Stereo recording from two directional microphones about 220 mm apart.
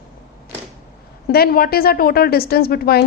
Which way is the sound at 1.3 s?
45° left (ahead or behind).